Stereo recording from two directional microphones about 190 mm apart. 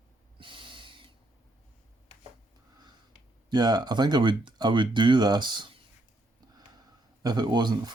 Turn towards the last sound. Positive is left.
turn(degrees=-20)  # may be behind; listen again after turning